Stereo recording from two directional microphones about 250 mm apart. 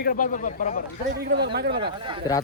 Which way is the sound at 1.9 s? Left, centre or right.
Centre.